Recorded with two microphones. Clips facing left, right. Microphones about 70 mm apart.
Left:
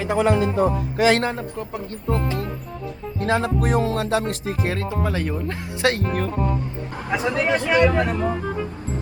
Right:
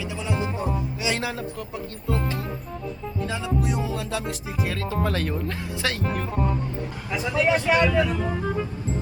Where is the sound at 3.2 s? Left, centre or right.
Left.